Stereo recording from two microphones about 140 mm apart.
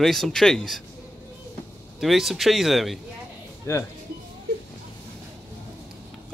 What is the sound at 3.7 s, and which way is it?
Speech, 20° left (ahead or behind).